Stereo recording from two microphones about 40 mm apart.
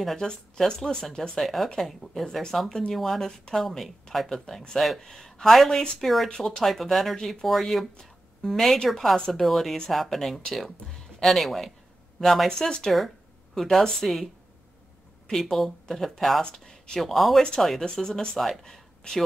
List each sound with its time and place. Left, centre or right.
0.0 s speech: centre
0.3 s speech: centre
1.4 s speech: centre
3.3 s speech: centre
3.5 s speech: centre
8.0 s a sound: centre
8.8 s speech: centre
9.3 s speech: centre
12.4 s speech: centre
13.6 s speech: centre
15.5 s speech: centre
16.4 s speech: centre
17.0 s speech: centre
18.6 s a sound: centre